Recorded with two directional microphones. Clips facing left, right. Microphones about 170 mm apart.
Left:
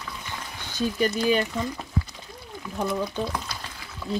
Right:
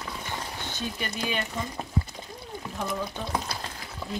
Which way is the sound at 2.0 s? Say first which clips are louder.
Even; 30° right (ahead or behind).